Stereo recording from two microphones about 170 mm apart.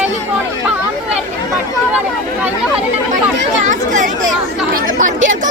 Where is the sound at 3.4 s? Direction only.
45° right (ahead or behind).